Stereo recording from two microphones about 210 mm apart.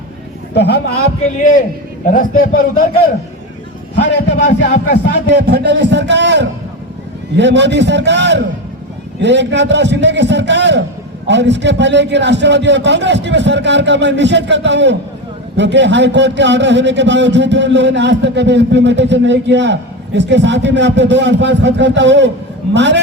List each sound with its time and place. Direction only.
0.5 s a man's voice: 50° left (ahead or behind)
1.4 s speech: 40° left (ahead or behind)
3.9 s a man's voice: 55° left (ahead or behind)
5.3 s a man's voice: 55° right (ahead or behind)